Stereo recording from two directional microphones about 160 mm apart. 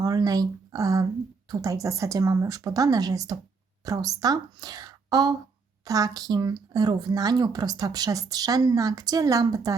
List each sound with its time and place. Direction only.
0.0 s speech: 25° right (ahead or behind)